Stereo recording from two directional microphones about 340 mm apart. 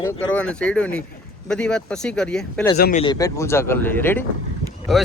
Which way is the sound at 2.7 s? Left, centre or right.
Left.